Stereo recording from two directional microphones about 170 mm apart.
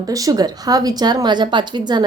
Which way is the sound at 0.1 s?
20° right (ahead or behind).